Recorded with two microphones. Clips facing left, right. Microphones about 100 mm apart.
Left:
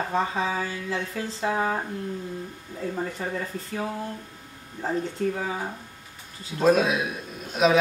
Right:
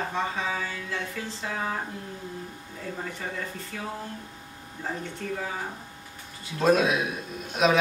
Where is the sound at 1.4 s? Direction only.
30° left (ahead or behind).